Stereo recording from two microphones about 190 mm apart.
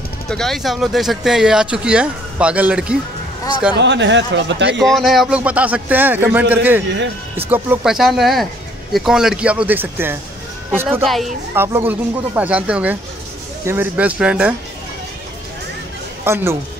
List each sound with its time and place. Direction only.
0.3 s speech: centre (ahead or behind)
3.7 s speech: 70° right (ahead or behind)
4.7 s speech: centre (ahead or behind)
16.3 s speech: 10° right (ahead or behind)